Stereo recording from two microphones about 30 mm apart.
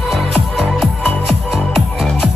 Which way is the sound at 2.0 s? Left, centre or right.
Centre.